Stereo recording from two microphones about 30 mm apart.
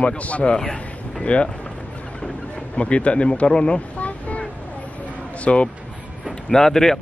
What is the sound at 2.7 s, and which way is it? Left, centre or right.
Speech, left.